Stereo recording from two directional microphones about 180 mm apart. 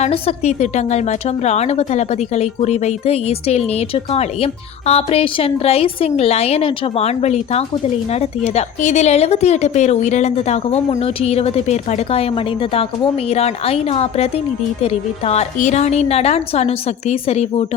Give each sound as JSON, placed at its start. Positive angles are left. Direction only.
{"t": 0.0, "sound": "a woman's voice", "side_deg": 35}